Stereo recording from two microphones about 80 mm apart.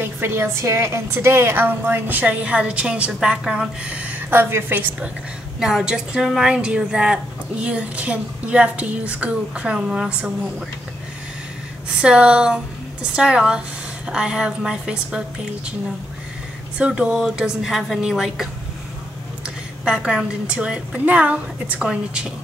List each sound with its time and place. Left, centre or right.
0.0 s a woman's voice: right; by 4.2 s centre
4.3 s a woman's voice: right
5.6 s a woman's voice: centre
12.0 s a woman's voice: centre
16.7 s a woman's voice: centre